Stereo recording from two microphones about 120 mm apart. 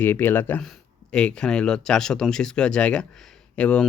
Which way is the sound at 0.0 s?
15° left (ahead or behind).